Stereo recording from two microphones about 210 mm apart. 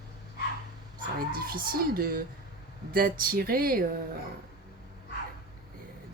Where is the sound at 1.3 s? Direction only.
45° right (ahead or behind).